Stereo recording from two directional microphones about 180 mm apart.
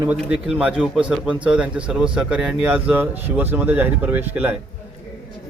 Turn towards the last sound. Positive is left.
turn(degrees=-10)  # may be behind; listen again after turning